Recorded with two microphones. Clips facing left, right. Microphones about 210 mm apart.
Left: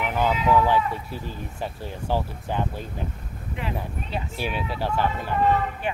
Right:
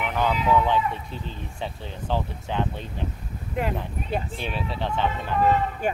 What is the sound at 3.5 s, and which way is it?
Speech, 50° right (ahead or behind).